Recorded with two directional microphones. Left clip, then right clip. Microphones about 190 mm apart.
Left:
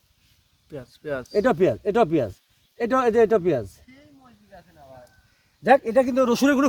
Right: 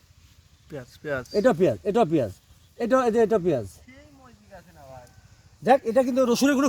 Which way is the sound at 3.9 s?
30° right (ahead or behind).